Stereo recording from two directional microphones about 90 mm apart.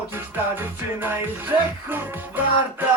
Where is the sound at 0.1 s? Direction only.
25° right (ahead or behind).